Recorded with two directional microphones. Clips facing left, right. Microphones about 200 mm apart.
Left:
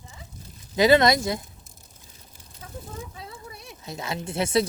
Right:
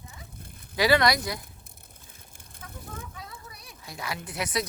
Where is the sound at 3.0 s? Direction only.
25° left (ahead or behind).